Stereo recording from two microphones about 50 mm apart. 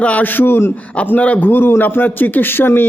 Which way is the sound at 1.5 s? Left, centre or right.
Left.